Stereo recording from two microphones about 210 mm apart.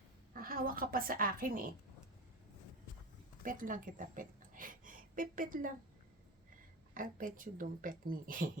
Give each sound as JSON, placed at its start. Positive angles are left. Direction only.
{"t": 0.3, "sound": "a woman's voice", "side_deg": -45}
{"t": 3.4, "sound": "a woman's voice", "side_deg": -40}
{"t": 6.9, "sound": "speech", "side_deg": -40}